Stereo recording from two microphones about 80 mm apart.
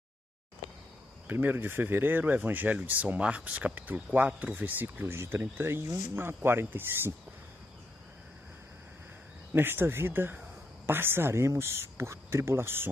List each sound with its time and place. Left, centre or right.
1.2 s speech: right
9.5 s speech: right